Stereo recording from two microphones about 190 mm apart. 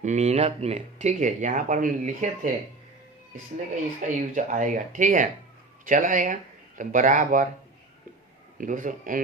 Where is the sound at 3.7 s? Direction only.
40° right (ahead or behind).